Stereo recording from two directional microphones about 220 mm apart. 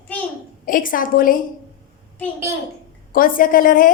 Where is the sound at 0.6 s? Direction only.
40° left (ahead or behind).